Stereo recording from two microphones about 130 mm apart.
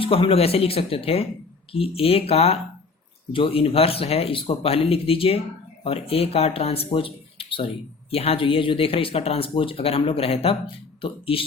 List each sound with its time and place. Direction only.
0.0 s speech: 45° left (ahead or behind)